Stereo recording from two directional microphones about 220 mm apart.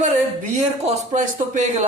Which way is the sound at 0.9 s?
30° right (ahead or behind).